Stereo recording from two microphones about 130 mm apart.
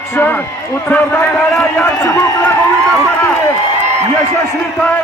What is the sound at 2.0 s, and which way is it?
Speech, 25° left (ahead or behind).